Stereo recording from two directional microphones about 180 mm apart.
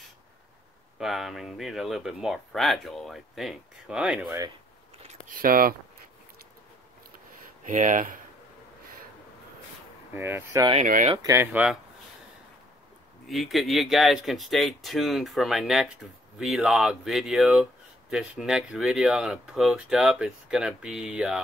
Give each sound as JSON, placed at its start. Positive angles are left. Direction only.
{"t": 0.9, "sound": "speech", "side_deg": 0}
{"t": 5.3, "sound": "speech", "side_deg": -50}
{"t": 7.6, "sound": "speech", "side_deg": -45}
{"t": 10.1, "sound": "speech", "side_deg": -15}
{"t": 13.3, "sound": "speech", "side_deg": 0}